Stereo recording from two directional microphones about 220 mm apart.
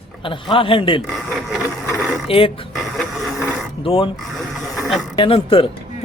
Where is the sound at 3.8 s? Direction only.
25° left (ahead or behind).